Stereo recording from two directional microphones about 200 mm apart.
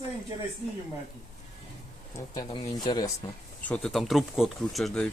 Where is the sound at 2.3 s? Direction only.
20° left (ahead or behind).